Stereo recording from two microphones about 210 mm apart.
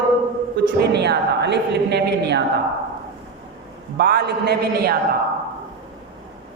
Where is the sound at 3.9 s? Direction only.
50° right (ahead or behind).